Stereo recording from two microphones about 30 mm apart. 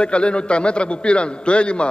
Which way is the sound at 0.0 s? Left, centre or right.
Left.